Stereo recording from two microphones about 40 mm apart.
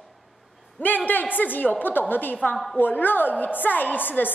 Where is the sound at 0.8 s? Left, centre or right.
Left.